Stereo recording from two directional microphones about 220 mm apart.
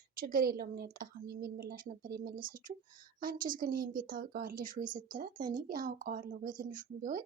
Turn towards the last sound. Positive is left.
turn(degrees=-35)  # may be behind; listen again after turning